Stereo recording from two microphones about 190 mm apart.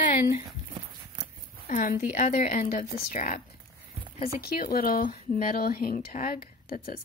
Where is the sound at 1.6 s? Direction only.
45° left (ahead or behind).